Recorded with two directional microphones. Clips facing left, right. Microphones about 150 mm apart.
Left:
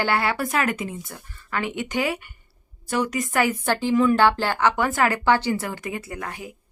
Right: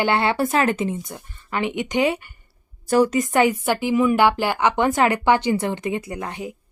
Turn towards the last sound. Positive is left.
turn(degrees=-20)  # may be behind; listen again after turning